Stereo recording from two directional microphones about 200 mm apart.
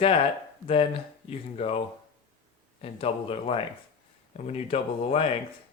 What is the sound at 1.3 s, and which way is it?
Speech, 30° left (ahead or behind).